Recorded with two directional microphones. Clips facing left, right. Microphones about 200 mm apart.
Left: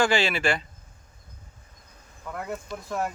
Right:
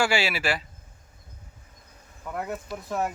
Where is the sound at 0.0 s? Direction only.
10° right (ahead or behind).